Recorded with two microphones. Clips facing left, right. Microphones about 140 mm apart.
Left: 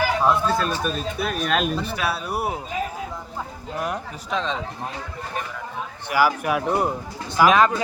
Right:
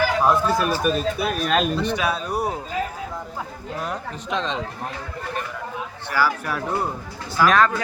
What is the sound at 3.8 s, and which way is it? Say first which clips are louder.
Speech: left 2 dB; 15° left (ahead or behind).